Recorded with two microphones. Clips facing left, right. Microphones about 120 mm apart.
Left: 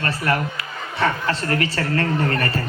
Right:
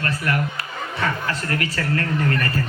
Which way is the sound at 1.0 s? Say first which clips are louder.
Left 4 dB; 30° left (ahead or behind).